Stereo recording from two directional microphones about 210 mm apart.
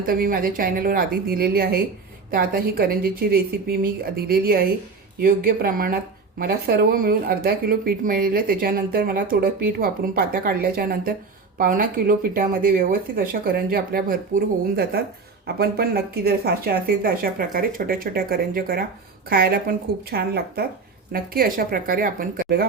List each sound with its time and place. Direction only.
0.0 s speech: 40° right (ahead or behind)